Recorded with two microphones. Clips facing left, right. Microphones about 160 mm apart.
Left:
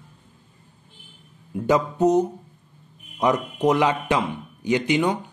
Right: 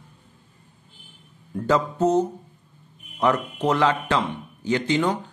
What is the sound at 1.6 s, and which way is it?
A man's voice, 15° left (ahead or behind).